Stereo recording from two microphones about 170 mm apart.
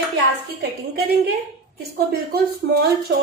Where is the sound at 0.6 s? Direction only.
65° right (ahead or behind).